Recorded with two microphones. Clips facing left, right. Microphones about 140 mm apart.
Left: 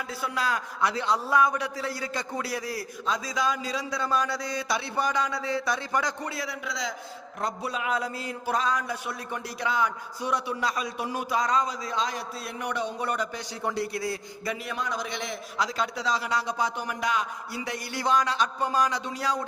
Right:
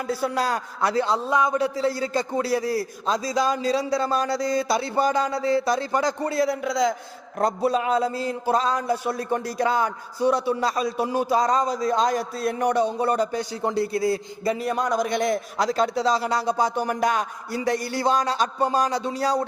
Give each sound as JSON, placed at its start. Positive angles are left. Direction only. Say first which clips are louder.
{"t": 0.1, "sound": "a man's voice", "louder": "right 6 dB", "side_deg": -40}